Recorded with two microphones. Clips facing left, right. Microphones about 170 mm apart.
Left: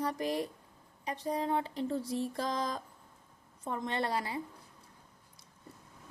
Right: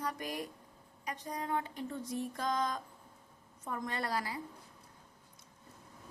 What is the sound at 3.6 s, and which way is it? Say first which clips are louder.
Speech: left 4 dB; 25° left (ahead or behind).